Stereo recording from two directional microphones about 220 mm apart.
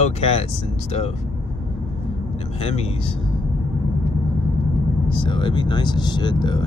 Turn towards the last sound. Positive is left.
turn(degrees=20)  # may be behind; listen again after turning